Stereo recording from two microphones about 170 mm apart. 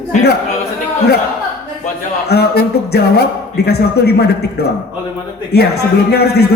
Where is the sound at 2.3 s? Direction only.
70° left (ahead or behind).